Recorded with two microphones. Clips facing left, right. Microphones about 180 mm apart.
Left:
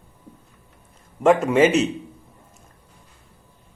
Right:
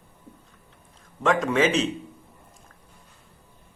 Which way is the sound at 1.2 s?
10° left (ahead or behind).